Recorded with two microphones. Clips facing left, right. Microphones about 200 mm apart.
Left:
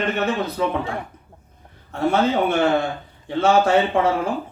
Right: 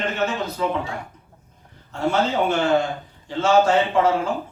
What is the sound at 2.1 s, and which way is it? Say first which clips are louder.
Speech: left 2 dB; 55° left (ahead or behind).